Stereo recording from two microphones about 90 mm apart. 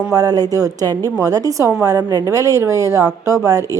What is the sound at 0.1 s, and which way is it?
A woman's voice, 45° right (ahead or behind).